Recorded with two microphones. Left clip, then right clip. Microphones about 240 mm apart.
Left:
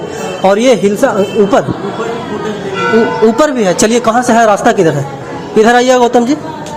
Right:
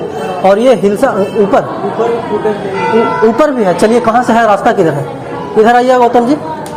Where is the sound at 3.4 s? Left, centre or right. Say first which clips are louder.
Right 1 dB; left.